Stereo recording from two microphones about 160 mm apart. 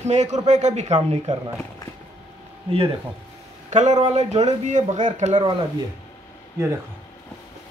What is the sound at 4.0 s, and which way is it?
Speech, 45° right (ahead or behind).